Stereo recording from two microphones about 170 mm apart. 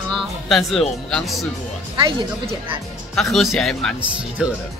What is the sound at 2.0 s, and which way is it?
Speech, 30° right (ahead or behind).